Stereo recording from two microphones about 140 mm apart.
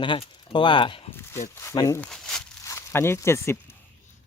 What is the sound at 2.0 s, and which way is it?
Crumpling, 5° left (ahead or behind).